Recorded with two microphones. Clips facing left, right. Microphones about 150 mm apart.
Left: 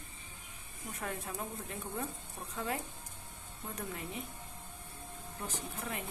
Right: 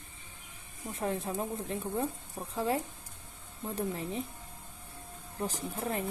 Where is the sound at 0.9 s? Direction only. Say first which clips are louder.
Right 7 dB; 25° right (ahead or behind).